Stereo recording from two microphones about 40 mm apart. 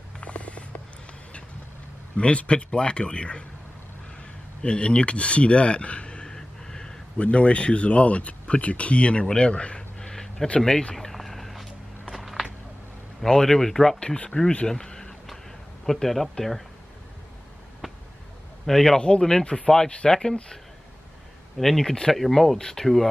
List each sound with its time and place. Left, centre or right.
0.2 s a sound: left
2.1 s a man's voice: left
4.6 s speech: left
7.2 s a man's voice: left
9.8 s a sound: centre
13.2 s speech: centre
13.9 s a man's voice: left
14.7 s a sound: centre
15.8 s speech: centre
18.7 s speech: centre
18.9 s a man's voice: left
21.5 s speech: centre